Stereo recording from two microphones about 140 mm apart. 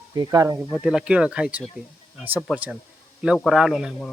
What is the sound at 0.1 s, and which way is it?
Speech, 30° right (ahead or behind).